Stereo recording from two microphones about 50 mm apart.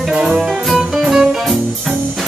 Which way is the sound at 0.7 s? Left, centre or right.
Centre.